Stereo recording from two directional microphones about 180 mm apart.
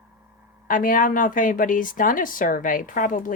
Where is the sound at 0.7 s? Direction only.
50° left (ahead or behind).